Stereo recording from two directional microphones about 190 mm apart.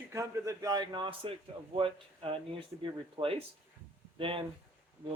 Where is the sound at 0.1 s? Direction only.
15° right (ahead or behind).